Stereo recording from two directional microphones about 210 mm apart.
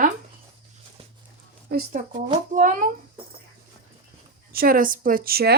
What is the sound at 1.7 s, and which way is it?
Speech, 50° right (ahead or behind).